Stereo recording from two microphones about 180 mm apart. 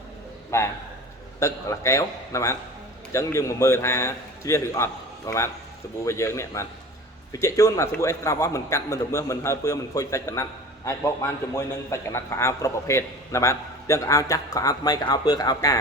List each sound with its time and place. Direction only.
0.5 s a man's voice: 15° left (ahead or behind)